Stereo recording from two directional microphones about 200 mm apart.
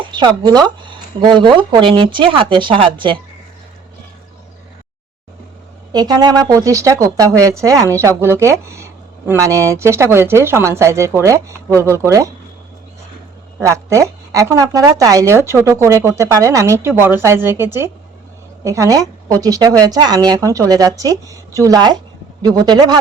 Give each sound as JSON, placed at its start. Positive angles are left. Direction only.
{"t": 0.0, "sound": "speech", "side_deg": -25}
{"t": 5.9, "sound": "a woman's voice", "side_deg": -20}
{"t": 13.6, "sound": "a woman's voice", "side_deg": -15}